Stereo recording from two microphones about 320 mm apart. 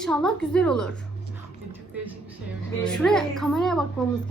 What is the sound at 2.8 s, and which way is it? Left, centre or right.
A woman's voice, centre.